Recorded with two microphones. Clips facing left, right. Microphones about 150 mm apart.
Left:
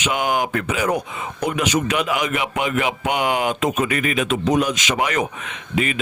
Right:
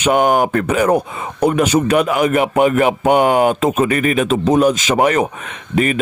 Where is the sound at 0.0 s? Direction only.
40° right (ahead or behind).